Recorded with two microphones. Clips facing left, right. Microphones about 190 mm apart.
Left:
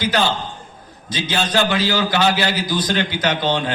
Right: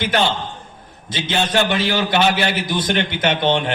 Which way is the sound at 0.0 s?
25° right (ahead or behind).